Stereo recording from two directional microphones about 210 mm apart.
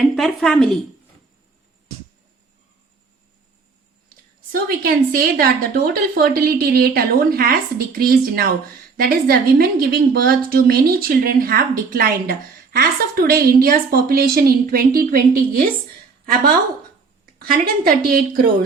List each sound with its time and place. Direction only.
0.2 s speech: centre (ahead or behind)
4.5 s a woman's voice: 45° right (ahead or behind)
17.4 s a woman's voice: 45° right (ahead or behind)